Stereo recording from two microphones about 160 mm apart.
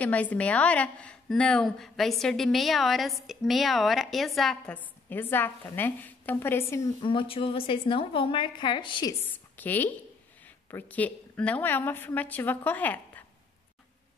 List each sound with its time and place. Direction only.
0.0 s a woman's voice: 10° left (ahead or behind)
5.1 s a woman's voice: 15° left (ahead or behind)
7.0 s a woman's voice: 30° left (ahead or behind)
9.2 s a woman's voice: 10° left (ahead or behind)